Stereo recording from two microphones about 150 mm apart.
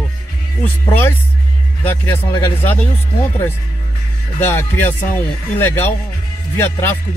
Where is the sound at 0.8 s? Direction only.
15° left (ahead or behind).